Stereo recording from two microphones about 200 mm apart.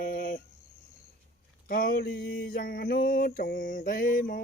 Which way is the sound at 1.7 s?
45° left (ahead or behind).